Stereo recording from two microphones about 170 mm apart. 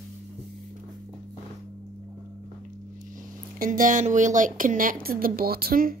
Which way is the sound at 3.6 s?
50° right (ahead or behind).